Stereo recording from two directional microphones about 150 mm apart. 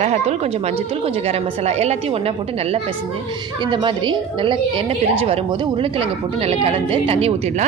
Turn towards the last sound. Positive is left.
turn(degrees=-40)  # may be behind; listen again after turning